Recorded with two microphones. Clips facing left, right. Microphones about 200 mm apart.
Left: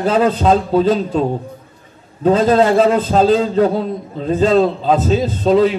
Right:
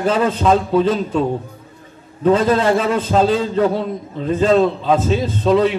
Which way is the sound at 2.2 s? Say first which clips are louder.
Left 2 dB; 30° left (ahead or behind).